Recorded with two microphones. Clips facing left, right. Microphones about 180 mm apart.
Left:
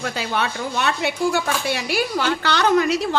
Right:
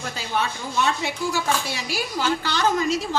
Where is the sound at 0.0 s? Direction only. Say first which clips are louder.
Left 3 dB; 70° left (ahead or behind).